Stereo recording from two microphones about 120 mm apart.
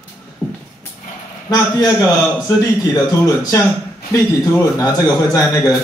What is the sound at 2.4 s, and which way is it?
A man's voice, 30° left (ahead or behind).